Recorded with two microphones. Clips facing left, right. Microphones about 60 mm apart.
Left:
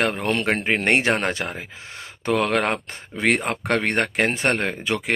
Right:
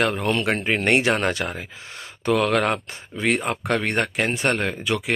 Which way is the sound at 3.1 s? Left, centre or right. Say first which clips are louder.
Left 1 dB; left.